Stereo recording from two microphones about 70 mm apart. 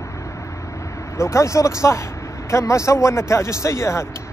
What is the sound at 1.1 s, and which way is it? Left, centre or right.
Speech, left.